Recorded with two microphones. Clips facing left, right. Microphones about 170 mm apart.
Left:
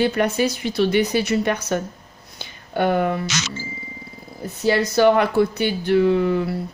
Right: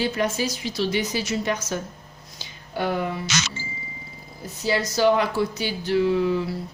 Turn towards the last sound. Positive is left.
turn(degrees=55)  # may be behind; listen again after turning